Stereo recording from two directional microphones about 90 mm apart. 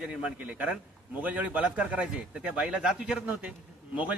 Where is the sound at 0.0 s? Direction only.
15° right (ahead or behind).